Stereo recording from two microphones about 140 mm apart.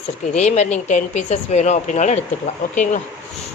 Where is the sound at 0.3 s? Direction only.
55° left (ahead or behind).